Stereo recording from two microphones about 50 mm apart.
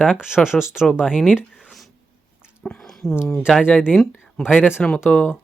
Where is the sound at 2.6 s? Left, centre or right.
Left.